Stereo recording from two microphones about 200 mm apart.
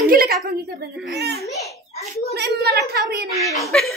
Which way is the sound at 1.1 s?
55° right (ahead or behind).